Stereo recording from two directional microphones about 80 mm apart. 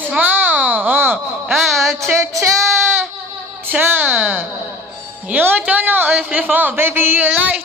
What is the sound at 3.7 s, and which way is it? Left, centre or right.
A man's voice, right.